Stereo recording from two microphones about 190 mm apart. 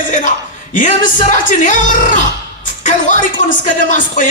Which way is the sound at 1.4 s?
45° left (ahead or behind).